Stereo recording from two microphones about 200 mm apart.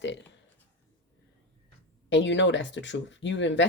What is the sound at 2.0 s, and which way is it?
Speech, 65° left (ahead or behind).